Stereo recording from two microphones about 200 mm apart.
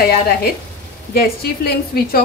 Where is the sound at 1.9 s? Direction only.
50° left (ahead or behind).